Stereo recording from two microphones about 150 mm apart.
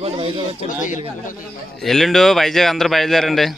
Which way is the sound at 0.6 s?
60° left (ahead or behind).